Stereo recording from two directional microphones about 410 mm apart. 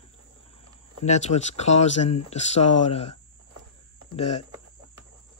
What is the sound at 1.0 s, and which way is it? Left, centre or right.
Speech, centre.